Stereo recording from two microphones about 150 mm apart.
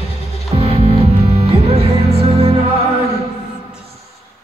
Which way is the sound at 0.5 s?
40° right (ahead or behind).